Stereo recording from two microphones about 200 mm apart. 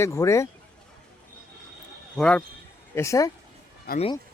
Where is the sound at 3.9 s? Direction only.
50° left (ahead or behind).